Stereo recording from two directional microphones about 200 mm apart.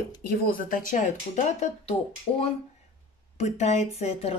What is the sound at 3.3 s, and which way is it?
Speech, 35° left (ahead or behind).